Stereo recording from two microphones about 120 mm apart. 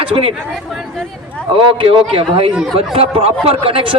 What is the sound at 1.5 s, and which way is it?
Speech, 45° right (ahead or behind).